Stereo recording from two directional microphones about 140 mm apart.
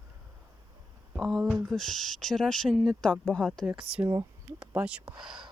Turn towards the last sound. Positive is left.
turn(degrees=-10)  # may be behind; listen again after turning